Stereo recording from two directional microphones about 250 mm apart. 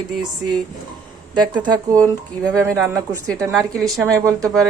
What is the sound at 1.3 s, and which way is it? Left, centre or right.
Speech, centre.